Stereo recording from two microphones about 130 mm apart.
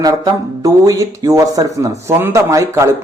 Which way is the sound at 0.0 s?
25° right (ahead or behind).